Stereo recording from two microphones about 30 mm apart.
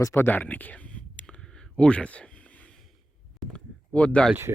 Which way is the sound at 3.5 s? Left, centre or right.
Left.